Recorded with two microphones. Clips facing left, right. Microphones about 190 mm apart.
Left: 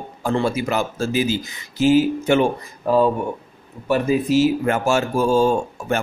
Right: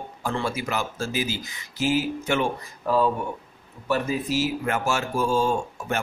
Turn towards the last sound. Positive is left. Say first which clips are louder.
# left 5 dB
turn(degrees=30)  # may be behind; listen again after turning